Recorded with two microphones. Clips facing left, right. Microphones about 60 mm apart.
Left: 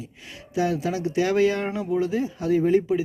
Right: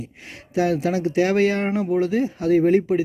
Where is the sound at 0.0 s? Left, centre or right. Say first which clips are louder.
Right 3 dB; right.